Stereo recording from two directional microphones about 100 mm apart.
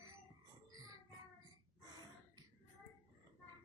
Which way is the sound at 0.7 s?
40° right (ahead or behind).